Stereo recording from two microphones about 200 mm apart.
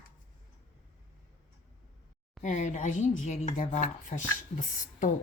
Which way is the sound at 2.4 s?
35° left (ahead or behind).